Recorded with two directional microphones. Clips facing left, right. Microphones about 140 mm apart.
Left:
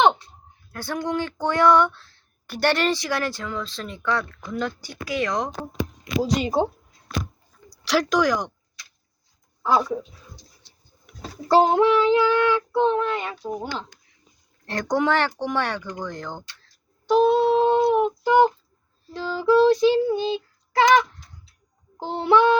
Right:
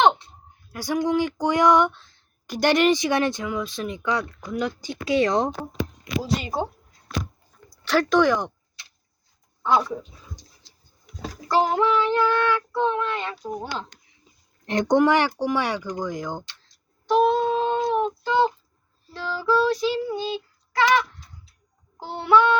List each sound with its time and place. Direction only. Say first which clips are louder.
0.7 s speech: right 4 dB; 10° right (ahead or behind); by 5.5 s 30° right (ahead or behind)
6.1 s child singing: left 4 dB; 20° left (ahead or behind)
7.9 s speech: right 2 dB; centre (ahead or behind)
10.6 s vehicle: right 1 dB; 90° right
11.1 s a sound: right 4 dB; 60° left (ahead or behind)
11.4 s child singing: left 4 dB; 30° left (ahead or behind)
11.9 s child singing: left 3 dB; 10° left (ahead or behind)
13.4 s speech: left 1 dB; 5° left (ahead or behind)
14.7 s speech: right 4 dB; 20° right (ahead or behind)
17.3 s child singing: left 4 dB; 15° left (ahead or behind)
21.9 s child singing: left 1 dB; 25° left (ahead or behind)